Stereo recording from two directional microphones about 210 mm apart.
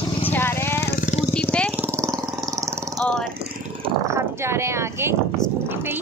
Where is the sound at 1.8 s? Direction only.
10° right (ahead or behind).